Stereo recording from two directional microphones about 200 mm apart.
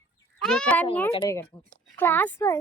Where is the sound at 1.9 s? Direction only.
10° left (ahead or behind).